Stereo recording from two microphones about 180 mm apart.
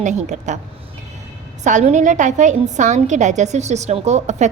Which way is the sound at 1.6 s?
40° right (ahead or behind).